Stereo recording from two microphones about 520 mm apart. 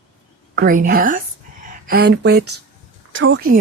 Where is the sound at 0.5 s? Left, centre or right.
Centre.